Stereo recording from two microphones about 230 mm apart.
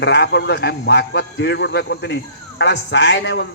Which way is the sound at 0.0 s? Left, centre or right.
Left.